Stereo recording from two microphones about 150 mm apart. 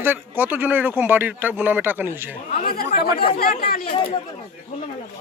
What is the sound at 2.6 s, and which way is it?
Speech, 80° left.